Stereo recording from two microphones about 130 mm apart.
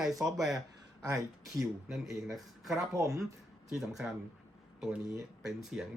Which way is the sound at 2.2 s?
Centre (ahead or behind).